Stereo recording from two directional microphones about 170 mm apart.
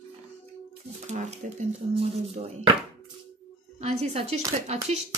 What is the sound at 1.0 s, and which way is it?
Speech, 40° right (ahead or behind).